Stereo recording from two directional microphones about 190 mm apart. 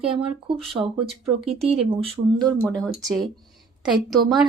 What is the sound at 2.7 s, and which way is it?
A woman's voice, 5° left (ahead or behind).